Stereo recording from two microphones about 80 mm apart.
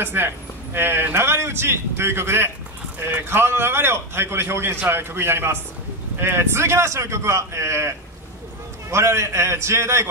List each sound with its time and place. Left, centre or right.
0.0 s a man's voice: right
8.9 s a man's voice: right